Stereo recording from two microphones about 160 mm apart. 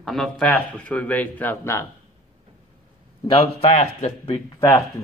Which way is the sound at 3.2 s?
40° left (ahead or behind).